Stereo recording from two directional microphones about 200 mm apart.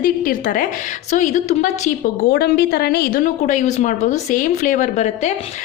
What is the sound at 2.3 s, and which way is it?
A woman's voice, 50° left (ahead or behind).